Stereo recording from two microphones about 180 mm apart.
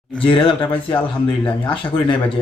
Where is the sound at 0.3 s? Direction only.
30° left (ahead or behind).